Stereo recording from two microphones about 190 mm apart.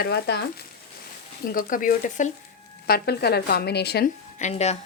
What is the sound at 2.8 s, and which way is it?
A woman's voice, 55° left (ahead or behind).